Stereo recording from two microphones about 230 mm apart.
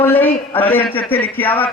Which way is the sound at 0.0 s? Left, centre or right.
Centre.